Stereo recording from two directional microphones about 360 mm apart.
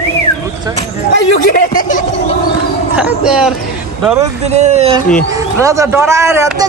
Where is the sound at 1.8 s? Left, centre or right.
Left.